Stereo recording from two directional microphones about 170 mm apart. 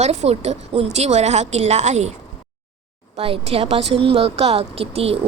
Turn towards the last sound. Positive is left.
turn(degrees=-35)  # may be behind; listen again after turning